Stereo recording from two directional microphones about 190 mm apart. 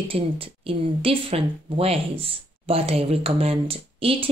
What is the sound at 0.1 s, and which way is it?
Speech, 30° right (ahead or behind).